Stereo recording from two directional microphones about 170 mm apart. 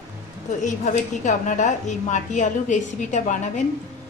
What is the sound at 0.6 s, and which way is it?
A woman's voice, 45° left (ahead or behind).